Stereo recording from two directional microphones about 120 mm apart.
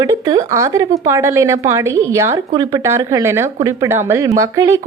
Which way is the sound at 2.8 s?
25° right (ahead or behind).